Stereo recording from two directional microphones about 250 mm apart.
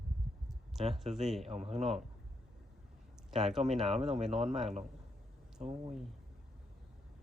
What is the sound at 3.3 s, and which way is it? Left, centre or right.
Speech, centre.